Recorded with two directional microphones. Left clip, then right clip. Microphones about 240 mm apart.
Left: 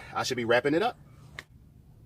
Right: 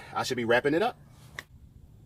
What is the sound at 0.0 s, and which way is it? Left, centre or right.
Speech, centre.